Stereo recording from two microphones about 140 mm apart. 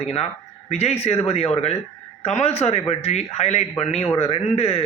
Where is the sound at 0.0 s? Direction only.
50° left (ahead or behind).